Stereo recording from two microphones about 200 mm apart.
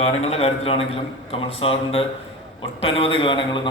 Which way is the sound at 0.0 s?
30° left (ahead or behind).